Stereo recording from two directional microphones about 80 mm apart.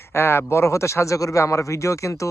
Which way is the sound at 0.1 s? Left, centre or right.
Left.